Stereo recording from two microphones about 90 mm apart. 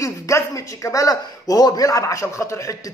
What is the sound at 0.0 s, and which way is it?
A man's voice, 35° left (ahead or behind).